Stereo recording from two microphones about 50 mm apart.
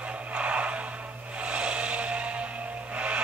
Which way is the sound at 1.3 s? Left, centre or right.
Right.